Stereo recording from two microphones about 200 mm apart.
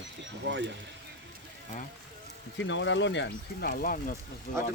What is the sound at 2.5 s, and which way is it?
Speech, 65° left (ahead or behind).